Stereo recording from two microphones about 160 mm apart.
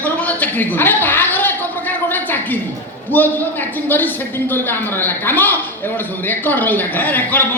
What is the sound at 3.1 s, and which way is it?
Speech, 10° left (ahead or behind).